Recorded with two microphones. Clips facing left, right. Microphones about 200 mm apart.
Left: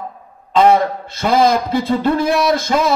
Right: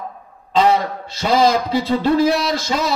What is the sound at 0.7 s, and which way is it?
Speech, 50° left (ahead or behind).